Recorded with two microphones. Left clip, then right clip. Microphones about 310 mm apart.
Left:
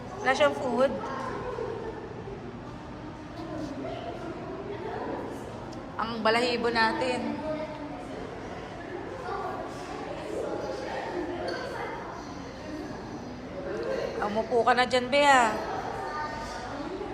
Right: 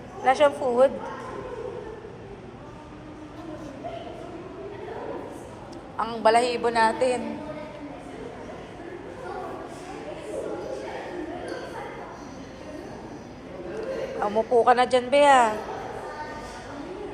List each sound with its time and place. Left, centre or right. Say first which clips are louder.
0.3 s a woman's voice: right 4 dB; centre
6.0 s a woman's voice: right 5 dB; centre
14.2 s a woman's voice: right 6 dB; centre